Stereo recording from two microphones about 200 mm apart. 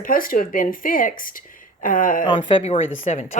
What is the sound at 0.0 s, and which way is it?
A woman's voice, 45° left (ahead or behind).